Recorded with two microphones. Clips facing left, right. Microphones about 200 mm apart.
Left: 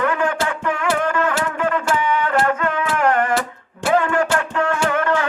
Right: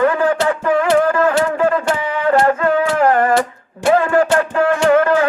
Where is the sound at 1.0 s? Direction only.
35° right (ahead or behind).